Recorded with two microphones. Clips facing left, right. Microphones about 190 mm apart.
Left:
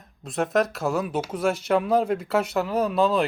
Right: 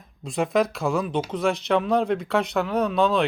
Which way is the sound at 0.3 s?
Centre (ahead or behind).